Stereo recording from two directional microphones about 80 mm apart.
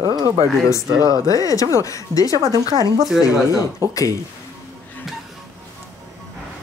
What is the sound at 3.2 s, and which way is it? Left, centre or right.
Speech, left.